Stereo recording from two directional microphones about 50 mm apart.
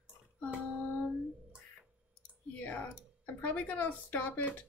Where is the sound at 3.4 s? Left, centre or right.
Left.